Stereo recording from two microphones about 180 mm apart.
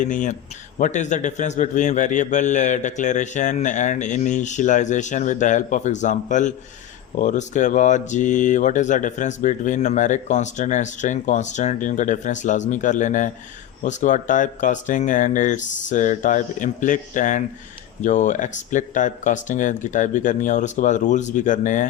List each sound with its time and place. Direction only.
0.0 s speech: 45° left (ahead or behind)